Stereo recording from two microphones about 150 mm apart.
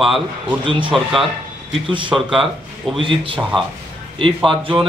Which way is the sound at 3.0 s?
35° right (ahead or behind).